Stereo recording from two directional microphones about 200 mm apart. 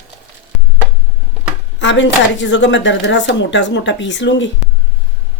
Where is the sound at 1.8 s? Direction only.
65° left (ahead or behind).